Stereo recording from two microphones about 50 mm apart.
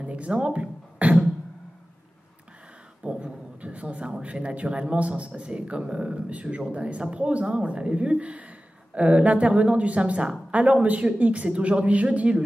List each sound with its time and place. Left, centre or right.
0.0 s speech: right
3.0 s a sound: right
4.2 s a man's voice: right